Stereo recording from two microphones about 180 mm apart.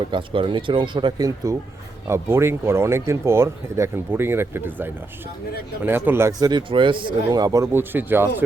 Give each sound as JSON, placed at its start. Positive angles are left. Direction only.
{"t": 0.1, "sound": "speech", "side_deg": -30}